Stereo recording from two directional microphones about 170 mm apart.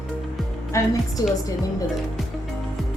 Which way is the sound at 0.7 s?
20° left (ahead or behind).